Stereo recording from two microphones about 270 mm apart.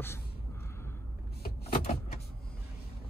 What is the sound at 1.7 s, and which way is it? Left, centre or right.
Vehicle, left.